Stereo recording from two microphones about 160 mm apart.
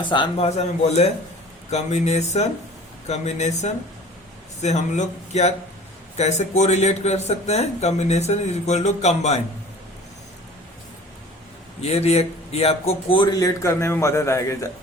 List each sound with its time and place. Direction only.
0.0 s a man's voice: 30° left (ahead or behind)
11.8 s a man's voice: 40° left (ahead or behind)
13.6 s a man's voice: 15° left (ahead or behind)